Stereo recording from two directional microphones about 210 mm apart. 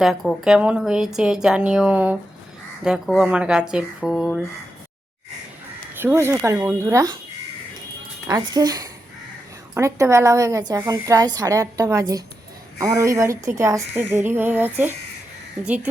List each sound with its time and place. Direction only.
0.0 s speech: centre (ahead or behind)
6.0 s a woman's voice: 10° right (ahead or behind)
8.3 s a woman's voice: 20° right (ahead or behind)